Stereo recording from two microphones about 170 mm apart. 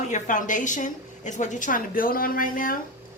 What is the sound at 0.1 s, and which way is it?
Speech, 50° left (ahead or behind).